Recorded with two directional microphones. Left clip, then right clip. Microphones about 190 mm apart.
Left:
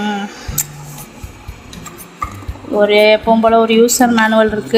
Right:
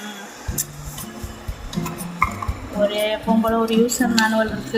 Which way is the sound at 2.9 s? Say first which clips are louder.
Left 12 dB; 50° left (ahead or behind).